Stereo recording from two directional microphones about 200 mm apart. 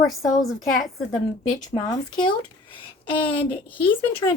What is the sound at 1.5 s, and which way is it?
Speech, 20° left (ahead or behind).